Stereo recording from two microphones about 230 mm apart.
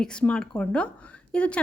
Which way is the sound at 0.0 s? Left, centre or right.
Centre.